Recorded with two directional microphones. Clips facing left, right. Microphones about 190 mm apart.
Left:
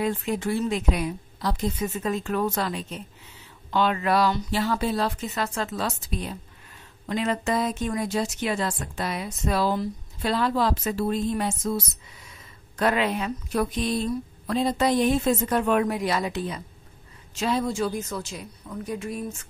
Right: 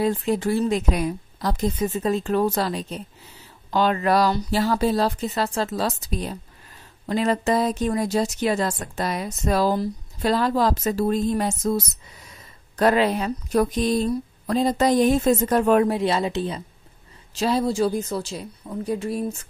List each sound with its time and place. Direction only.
0.0 s speech: 35° right (ahead or behind)